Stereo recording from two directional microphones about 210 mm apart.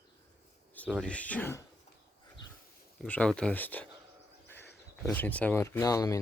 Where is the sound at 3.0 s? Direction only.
5° left (ahead or behind).